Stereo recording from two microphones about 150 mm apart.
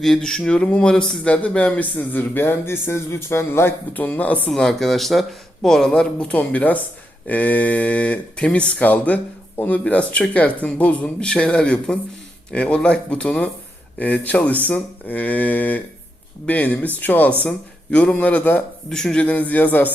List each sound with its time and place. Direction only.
0.0 s speech: 5° left (ahead or behind)